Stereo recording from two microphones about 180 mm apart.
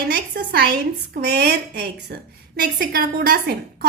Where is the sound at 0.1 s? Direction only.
65° right (ahead or behind).